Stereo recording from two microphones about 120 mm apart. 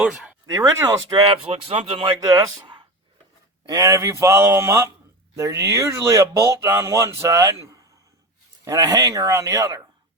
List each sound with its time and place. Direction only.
0.0 s speech: 5° right (ahead or behind)
0.4 s speech: 35° right (ahead or behind)
1.5 s speech: 55° right (ahead or behind)
2.2 s speech: 40° right (ahead or behind)
3.7 s speech: 30° right (ahead or behind)